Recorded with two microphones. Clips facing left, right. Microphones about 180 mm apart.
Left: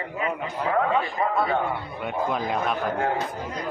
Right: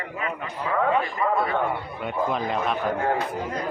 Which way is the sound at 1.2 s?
40° left (ahead or behind).